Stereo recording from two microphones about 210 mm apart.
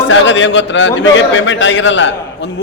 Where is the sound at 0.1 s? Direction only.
60° left (ahead or behind).